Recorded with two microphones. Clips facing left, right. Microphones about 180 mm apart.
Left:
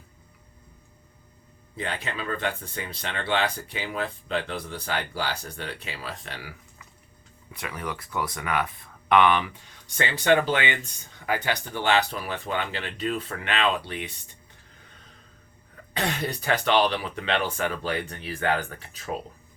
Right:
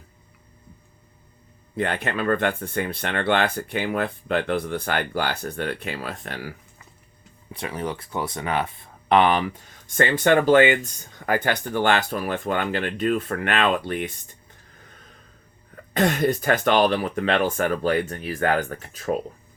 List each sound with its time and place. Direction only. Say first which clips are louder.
1.7 s speech: right 7 dB; 55° right (ahead or behind)
7.5 s speech: right 5 dB; 30° right (ahead or behind); by 14.1 s 50° right (ahead or behind)
15.7 s speech: right 8 dB; 50° right (ahead or behind)